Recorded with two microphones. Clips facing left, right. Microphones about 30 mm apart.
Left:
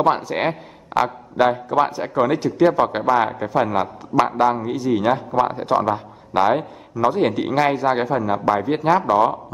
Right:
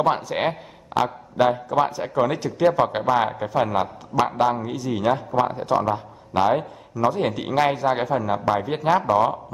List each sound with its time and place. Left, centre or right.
0.1 s a man's voice: centre
5.3 s a man's voice: left
7.3 s a man's voice: centre